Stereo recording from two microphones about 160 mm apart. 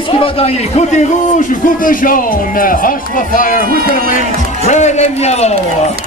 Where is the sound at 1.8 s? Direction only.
60° left (ahead or behind).